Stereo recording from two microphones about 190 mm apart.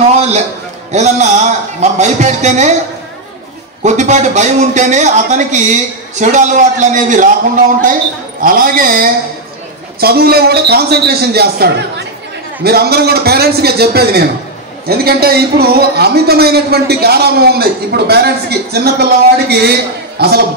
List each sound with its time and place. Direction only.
0.9 s a man's voice: 35° right (ahead or behind)
3.8 s a man's voice: 40° right (ahead or behind)
8.4 s a man's voice: 50° right (ahead or behind)